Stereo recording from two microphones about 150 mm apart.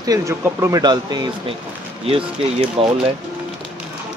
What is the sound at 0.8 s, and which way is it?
Speech, 30° right (ahead or behind).